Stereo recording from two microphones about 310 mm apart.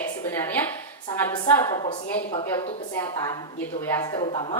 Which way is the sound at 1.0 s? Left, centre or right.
Centre.